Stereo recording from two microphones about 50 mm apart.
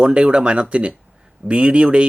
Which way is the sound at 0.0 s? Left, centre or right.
Right.